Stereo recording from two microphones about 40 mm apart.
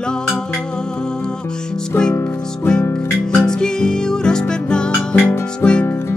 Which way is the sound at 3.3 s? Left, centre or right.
Centre.